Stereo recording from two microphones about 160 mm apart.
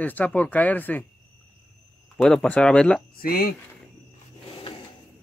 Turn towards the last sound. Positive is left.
turn(degrees=70)  # may be behind; listen again after turning